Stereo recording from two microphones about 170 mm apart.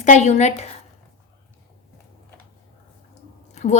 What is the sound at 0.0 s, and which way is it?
Speech, 45° left (ahead or behind).